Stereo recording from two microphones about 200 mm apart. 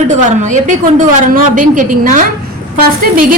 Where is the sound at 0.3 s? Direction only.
40° right (ahead or behind).